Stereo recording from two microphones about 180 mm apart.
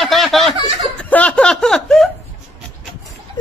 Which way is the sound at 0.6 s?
30° right (ahead or behind).